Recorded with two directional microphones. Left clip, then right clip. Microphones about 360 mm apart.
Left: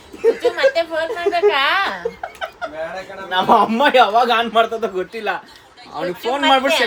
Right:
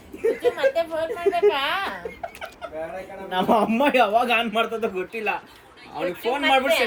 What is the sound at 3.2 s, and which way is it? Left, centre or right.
A man's voice, left.